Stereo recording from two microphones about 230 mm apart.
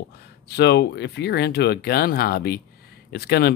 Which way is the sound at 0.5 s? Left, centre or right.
Left.